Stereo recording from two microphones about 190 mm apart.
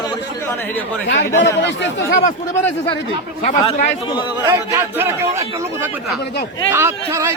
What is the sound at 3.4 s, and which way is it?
Speech, 40° left (ahead or behind).